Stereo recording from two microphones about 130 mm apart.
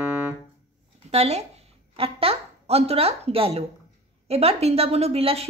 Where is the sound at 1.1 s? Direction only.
55° right (ahead or behind).